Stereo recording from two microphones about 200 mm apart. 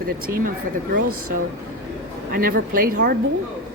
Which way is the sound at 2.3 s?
50° right (ahead or behind).